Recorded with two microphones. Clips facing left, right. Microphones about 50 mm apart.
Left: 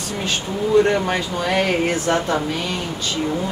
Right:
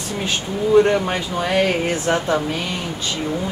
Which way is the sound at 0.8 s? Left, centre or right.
Centre.